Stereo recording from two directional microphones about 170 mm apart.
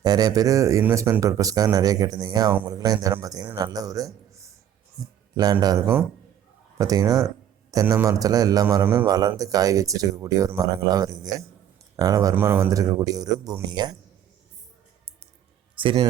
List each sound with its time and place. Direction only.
0.0 s a man's voice: 25° right (ahead or behind)
15.7 s music: 30° right (ahead or behind)